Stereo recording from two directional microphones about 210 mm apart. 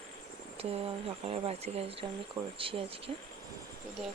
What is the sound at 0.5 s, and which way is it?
Speech, 30° right (ahead or behind).